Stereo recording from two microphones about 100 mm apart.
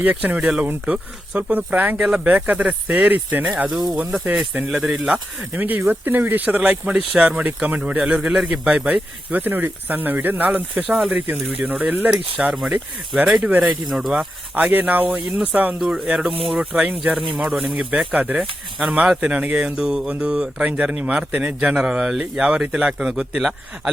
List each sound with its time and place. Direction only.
0.0 s speech: 15° right (ahead or behind)
3.7 s speech: centre (ahead or behind)
5.5 s speech: 15° right (ahead or behind)
13.8 s speech: centre (ahead or behind)
14.5 s speech: 20° right (ahead or behind)